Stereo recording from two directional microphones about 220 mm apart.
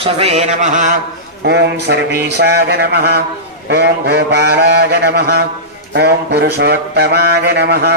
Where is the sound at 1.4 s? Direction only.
50° right (ahead or behind).